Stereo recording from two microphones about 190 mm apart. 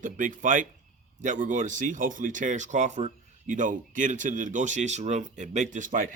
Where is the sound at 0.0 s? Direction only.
45° right (ahead or behind).